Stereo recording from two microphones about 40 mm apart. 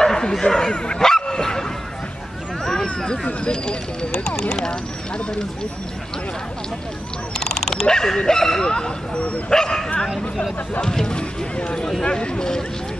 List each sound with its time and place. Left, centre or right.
0.0 s speech: centre
1.2 s dog: centre
2.6 s a sound: centre
3.4 s speech: left
7.3 s speech: centre